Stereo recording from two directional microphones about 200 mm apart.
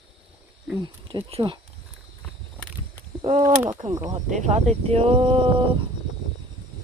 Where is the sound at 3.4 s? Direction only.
25° right (ahead or behind).